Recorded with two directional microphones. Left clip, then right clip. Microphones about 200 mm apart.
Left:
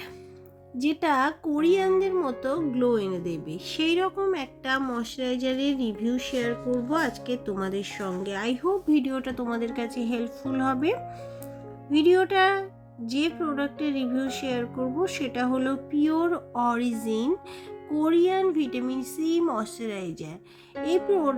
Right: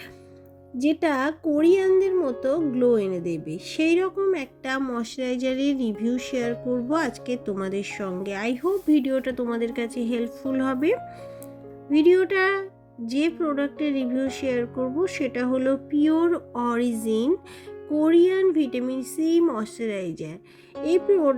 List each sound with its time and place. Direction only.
0.8 s speech: 10° right (ahead or behind)